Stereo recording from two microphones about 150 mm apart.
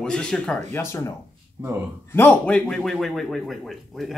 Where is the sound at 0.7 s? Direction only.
20° left (ahead or behind); by 4.2 s centre (ahead or behind).